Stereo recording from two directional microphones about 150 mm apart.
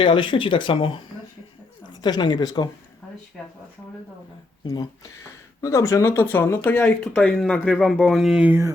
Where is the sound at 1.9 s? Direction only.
30° left (ahead or behind).